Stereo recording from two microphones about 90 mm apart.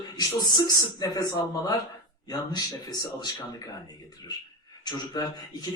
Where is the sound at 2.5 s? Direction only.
45° left (ahead or behind).